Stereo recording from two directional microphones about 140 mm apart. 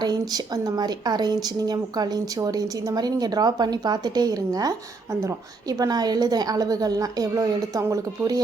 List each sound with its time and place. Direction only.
0.0 s speech: 30° right (ahead or behind)